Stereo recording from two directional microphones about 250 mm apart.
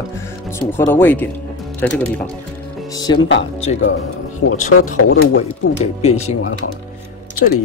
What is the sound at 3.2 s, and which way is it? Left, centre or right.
Speech, left.